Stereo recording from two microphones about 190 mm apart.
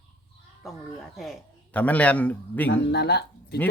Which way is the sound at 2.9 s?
60° left (ahead or behind).